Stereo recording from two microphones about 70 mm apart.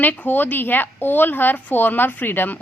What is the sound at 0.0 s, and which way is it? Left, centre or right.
A woman's voice, left.